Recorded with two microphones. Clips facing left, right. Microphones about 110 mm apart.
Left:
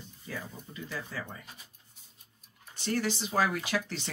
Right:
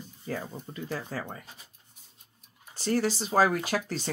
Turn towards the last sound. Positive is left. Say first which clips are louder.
# right 3 dB
turn(degrees=-40)  # may be behind; listen again after turning